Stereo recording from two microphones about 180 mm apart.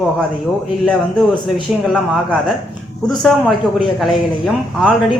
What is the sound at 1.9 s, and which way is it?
A man's voice, centre (ahead or behind).